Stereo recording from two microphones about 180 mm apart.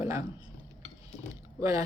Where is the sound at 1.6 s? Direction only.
20° right (ahead or behind).